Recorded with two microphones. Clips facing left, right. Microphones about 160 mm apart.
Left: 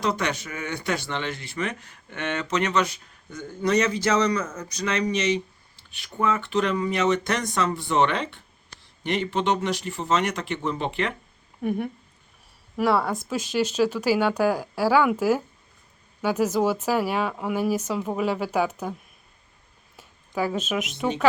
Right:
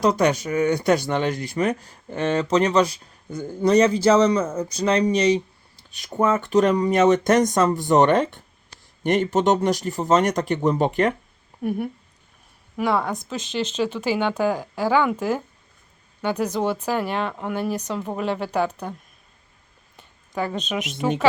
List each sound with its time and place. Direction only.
0.0 s speech: 40° right (ahead or behind)
11.6 s speech: 5° right (ahead or behind)
20.0 s a woman's voice: 5° left (ahead or behind)